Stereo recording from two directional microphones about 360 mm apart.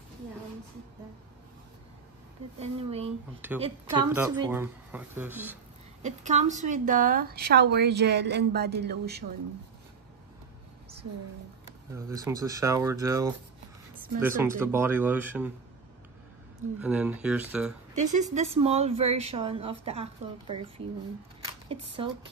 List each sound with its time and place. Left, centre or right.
2.6 s speech: centre
6.0 s a woman's voice: centre
11.9 s speech: centre
16.8 s speech: centre
17.9 s speech: centre
21.6 s speech: centre